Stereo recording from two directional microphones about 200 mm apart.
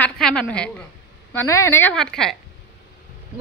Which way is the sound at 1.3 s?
10° left (ahead or behind).